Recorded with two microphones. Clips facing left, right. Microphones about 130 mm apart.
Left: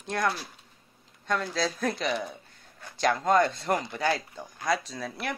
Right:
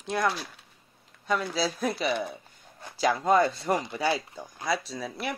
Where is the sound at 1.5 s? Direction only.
5° right (ahead or behind).